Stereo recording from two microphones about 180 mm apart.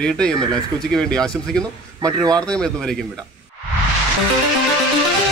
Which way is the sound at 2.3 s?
5° left (ahead or behind).